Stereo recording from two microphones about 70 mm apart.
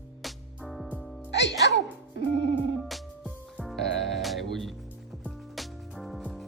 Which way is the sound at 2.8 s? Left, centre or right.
Centre.